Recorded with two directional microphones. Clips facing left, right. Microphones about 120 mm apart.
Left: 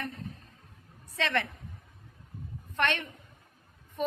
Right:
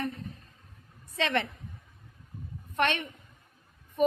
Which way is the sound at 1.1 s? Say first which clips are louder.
Right 2 dB; 20° right (ahead or behind).